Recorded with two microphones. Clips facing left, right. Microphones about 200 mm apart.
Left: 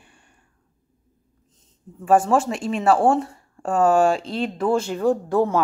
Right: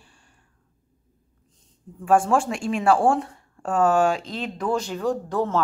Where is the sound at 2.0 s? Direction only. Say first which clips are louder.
Left 2 dB; 5° left (ahead or behind).